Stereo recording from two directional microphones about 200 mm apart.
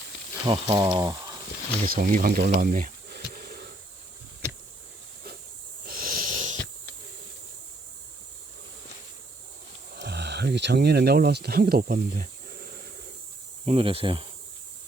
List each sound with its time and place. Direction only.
0.4 s speech: 25° right (ahead or behind)
1.8 s speech: 45° right (ahead or behind)
5.8 s wheeze: 45° right (ahead or behind)
9.9 s speech: 55° right (ahead or behind)
13.7 s speech: 30° right (ahead or behind)